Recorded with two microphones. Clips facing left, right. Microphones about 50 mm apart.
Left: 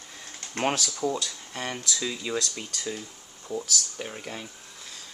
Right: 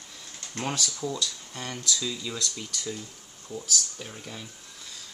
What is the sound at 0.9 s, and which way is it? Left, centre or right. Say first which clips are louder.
Speech: left 3 dB; left.